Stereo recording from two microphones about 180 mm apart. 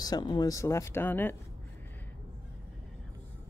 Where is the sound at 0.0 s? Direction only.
20° left (ahead or behind).